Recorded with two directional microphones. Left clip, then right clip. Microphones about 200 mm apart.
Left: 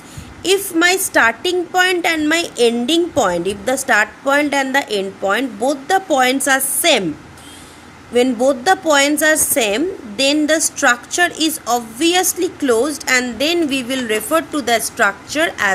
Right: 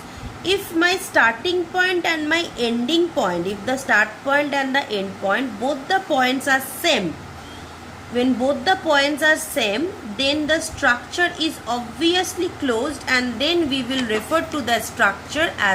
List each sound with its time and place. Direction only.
0.4 s a woman's voice: 60° left (ahead or behind)
8.1 s a woman's voice: 65° left (ahead or behind)